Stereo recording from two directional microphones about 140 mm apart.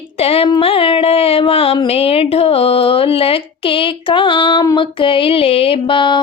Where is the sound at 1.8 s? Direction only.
45° left (ahead or behind).